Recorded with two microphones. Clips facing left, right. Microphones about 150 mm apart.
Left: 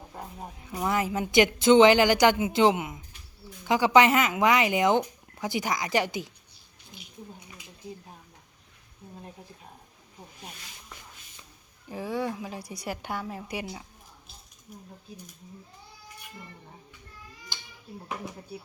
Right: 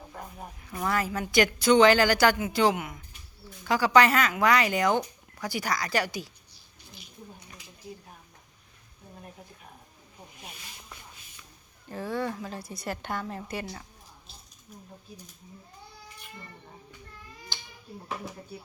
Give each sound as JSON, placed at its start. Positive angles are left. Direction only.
{"t": 0.1, "sound": "a woman's voice", "side_deg": 20}
{"t": 11.9, "sound": "a woman's voice", "side_deg": 10}